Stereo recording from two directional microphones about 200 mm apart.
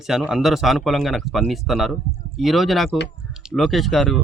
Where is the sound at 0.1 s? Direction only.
5° right (ahead or behind).